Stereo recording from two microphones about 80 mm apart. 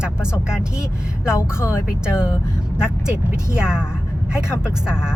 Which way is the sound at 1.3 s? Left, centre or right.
Left.